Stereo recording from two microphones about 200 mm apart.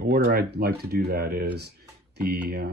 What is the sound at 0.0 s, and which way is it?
Speech, 50° right (ahead or behind).